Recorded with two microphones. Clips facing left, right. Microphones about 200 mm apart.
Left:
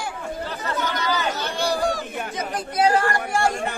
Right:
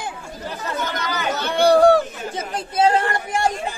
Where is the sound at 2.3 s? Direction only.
25° right (ahead or behind).